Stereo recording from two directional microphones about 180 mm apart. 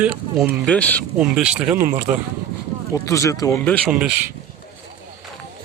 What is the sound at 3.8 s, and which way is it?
Speech, 5° right (ahead or behind).